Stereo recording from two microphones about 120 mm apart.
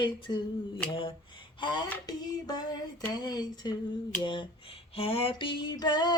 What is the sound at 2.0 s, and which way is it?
Speech, 35° left (ahead or behind).